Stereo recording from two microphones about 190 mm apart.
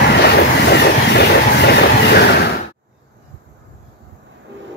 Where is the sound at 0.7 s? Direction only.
60° left (ahead or behind).